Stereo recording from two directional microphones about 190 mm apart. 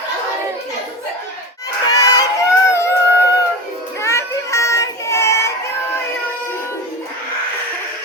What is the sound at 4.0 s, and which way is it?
Child singing, 15° left (ahead or behind).